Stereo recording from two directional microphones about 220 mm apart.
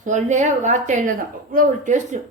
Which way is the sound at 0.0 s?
35° right (ahead or behind).